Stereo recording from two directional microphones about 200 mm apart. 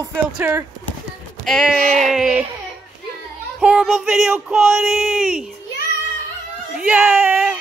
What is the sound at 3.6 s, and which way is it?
Speech, 5° right (ahead or behind).